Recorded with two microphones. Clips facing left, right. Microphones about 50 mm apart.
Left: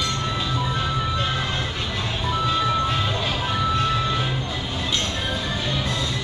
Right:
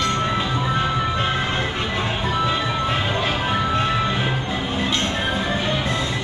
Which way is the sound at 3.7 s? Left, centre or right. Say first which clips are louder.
Right 1 dB; right.